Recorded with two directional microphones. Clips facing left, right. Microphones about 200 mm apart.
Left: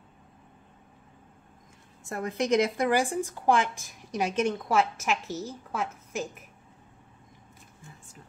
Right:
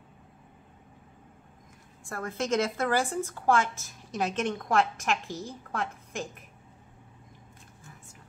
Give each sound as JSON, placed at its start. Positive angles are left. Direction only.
{"t": 2.0, "sound": "speech", "side_deg": 20}